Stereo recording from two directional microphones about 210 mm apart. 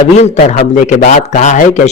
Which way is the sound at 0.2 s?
35° left (ahead or behind).